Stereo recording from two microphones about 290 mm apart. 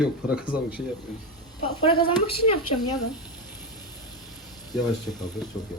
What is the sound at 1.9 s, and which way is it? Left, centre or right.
Speech, centre.